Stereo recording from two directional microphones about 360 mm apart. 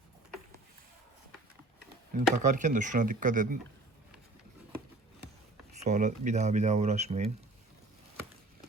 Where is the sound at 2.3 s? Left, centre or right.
Centre.